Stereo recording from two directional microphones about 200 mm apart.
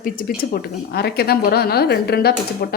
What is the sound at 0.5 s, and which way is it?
A woman's voice, 50° left (ahead or behind).